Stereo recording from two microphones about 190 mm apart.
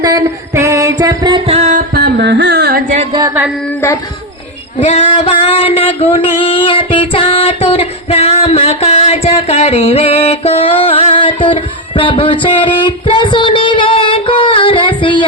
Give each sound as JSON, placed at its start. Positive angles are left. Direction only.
{"t": 0.0, "sound": "music", "side_deg": -20}
{"t": 1.9, "sound": "singing", "side_deg": -60}
{"t": 3.1, "sound": "carnatic music", "side_deg": -20}
{"t": 4.8, "sound": "a sound", "side_deg": 35}
{"t": 6.4, "sound": "female singing", "side_deg": 30}
{"t": 13.1, "sound": "music", "side_deg": 25}